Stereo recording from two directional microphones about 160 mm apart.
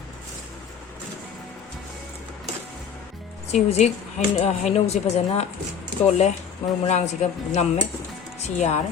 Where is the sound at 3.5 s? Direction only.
45° left (ahead or behind).